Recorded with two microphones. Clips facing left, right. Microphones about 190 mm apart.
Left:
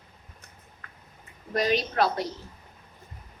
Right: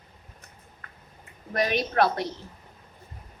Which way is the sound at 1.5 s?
60° right (ahead or behind).